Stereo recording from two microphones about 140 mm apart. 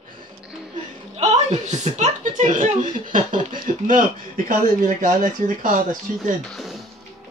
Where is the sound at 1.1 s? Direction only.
55° right (ahead or behind); by 6.0 s 70° right (ahead or behind).